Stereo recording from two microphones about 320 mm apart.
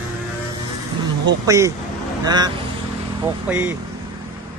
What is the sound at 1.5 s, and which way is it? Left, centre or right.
Speech, centre.